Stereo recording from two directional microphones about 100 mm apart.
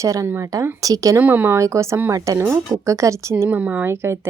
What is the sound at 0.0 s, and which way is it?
A woman's voice, 35° right (ahead or behind).